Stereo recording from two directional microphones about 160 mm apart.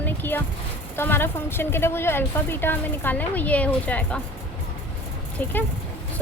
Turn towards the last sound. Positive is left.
turn(degrees=10)  # may be behind; listen again after turning